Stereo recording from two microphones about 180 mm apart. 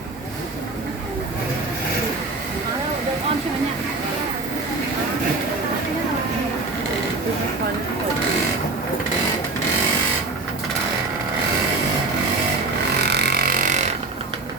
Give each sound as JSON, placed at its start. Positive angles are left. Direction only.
{"t": 13.0, "sound": "vehicle", "side_deg": -65}